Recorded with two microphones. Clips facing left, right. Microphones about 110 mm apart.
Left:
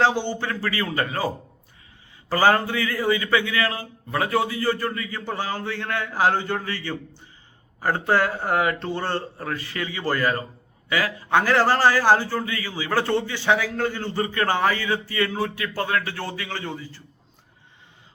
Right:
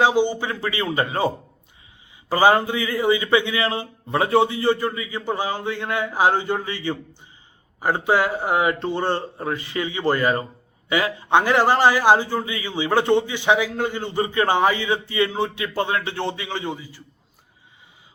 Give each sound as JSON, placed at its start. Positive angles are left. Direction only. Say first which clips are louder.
{"t": 0.0, "sound": "a man's voice", "louder": "right 3 dB", "side_deg": -15}
{"t": 2.3, "sound": "a man's voice", "louder": "right 2 dB", "side_deg": -15}